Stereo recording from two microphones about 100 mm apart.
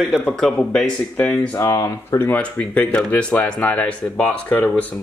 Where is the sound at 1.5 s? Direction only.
30° left (ahead or behind).